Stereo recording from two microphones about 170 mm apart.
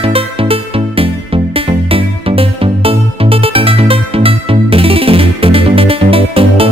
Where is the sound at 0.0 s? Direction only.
35° right (ahead or behind).